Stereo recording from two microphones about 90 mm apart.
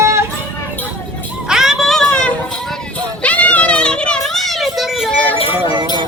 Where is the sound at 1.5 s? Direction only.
5° right (ahead or behind).